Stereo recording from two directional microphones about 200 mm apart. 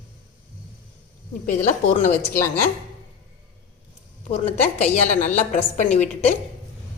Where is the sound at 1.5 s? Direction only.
35° left (ahead or behind).